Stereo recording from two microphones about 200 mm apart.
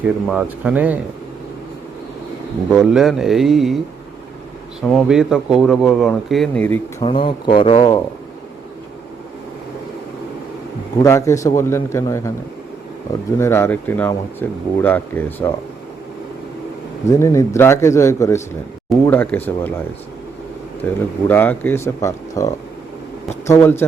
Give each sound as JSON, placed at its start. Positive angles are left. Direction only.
{"t": 0.0, "sound": "speech", "side_deg": -5}
{"t": 2.7, "sound": "speech", "side_deg": -5}
{"t": 4.9, "sound": "speech", "side_deg": 0}
{"t": 7.0, "sound": "speech", "side_deg": 25}
{"t": 11.0, "sound": "speech", "side_deg": 15}
{"t": 13.4, "sound": "speech", "side_deg": 10}
{"t": 17.1, "sound": "speech", "side_deg": 15}
{"t": 20.8, "sound": "speech", "side_deg": 10}